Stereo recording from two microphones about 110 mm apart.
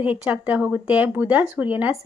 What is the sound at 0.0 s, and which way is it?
A woman's voice, 10° right (ahead or behind).